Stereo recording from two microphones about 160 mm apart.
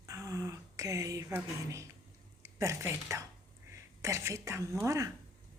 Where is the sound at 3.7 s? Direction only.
20° right (ahead or behind).